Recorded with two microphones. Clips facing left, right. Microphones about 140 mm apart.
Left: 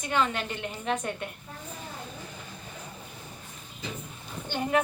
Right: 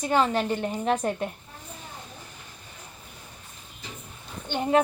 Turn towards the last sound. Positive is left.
turn(degrees=-25)  # may be behind; listen again after turning